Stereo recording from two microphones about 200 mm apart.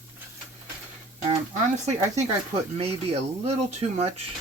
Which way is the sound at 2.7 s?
30° right (ahead or behind).